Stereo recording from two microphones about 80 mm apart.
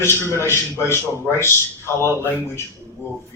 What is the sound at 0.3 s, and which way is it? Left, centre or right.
A man's voice, left.